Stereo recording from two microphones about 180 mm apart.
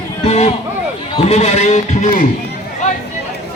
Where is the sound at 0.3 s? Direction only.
35° left (ahead or behind).